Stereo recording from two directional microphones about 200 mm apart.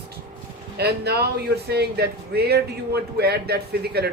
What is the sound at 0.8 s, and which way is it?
A man's voice, 55° right (ahead or behind).